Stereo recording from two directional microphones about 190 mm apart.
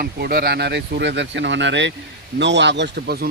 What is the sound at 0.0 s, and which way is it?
Speech, 55° right (ahead or behind).